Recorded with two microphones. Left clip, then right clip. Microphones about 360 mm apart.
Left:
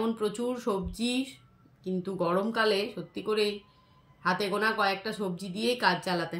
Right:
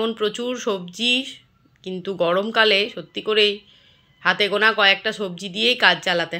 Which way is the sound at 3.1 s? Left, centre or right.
Centre.